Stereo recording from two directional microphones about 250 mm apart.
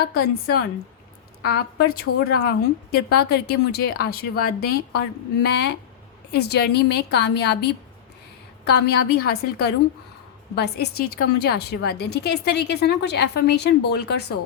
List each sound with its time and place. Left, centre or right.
1.4 s a woman's voice: left